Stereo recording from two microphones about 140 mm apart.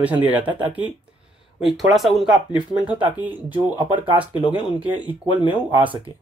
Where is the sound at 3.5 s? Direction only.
35° right (ahead or behind).